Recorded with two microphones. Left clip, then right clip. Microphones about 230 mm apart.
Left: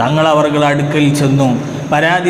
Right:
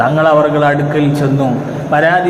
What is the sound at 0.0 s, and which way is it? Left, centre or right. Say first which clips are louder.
A man's voice: right 2 dB; left.